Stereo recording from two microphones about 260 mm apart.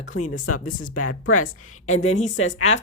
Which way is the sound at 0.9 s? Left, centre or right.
Left.